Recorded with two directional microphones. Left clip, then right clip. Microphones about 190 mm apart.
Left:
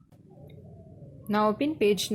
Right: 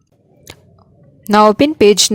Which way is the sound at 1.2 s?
55° right (ahead or behind).